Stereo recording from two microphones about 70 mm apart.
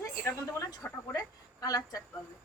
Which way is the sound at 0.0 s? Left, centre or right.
Left.